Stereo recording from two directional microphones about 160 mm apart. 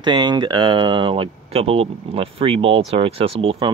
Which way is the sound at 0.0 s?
30° right (ahead or behind).